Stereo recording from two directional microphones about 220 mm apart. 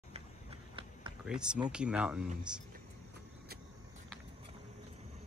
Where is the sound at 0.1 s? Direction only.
25° right (ahead or behind).